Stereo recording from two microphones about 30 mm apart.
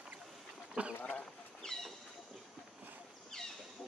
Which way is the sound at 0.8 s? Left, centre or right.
Right.